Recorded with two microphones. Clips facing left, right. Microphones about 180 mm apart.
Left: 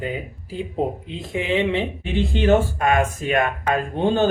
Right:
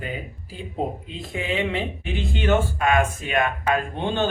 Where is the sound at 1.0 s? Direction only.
20° left (ahead or behind).